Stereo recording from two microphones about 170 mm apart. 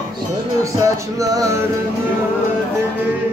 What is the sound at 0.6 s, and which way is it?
Music, 20° right (ahead or behind).